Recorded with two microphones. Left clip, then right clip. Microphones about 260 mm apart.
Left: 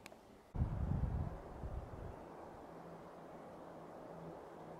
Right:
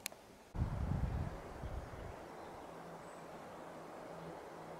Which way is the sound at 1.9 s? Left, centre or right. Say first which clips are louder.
Right 2 dB; centre.